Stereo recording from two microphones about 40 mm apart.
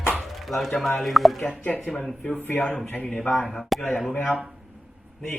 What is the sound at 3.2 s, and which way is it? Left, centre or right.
Speech, centre.